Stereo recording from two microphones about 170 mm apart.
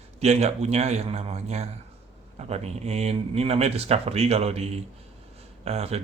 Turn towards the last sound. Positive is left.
turn(degrees=-35)  # may be behind; listen again after turning